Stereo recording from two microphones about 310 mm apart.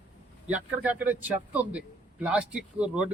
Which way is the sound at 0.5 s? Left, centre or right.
Centre.